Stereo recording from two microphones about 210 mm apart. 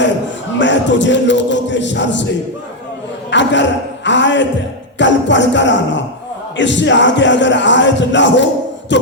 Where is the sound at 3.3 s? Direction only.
60° left (ahead or behind).